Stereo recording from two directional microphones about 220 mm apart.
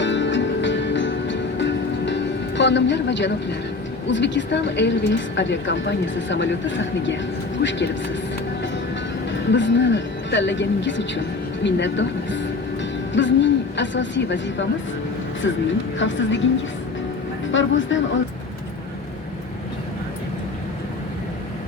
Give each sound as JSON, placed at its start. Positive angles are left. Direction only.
{"t": 0.0, "sound": "music", "side_deg": 55}
{"t": 4.0, "sound": "a woman's voice", "side_deg": 55}
{"t": 9.3, "sound": "a woman's voice", "side_deg": 55}
{"t": 16.0, "sound": "a woman's voice", "side_deg": 60}
{"t": 17.5, "sound": "a woman's voice", "side_deg": 60}